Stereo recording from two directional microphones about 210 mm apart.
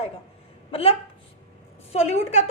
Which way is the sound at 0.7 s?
25° left (ahead or behind).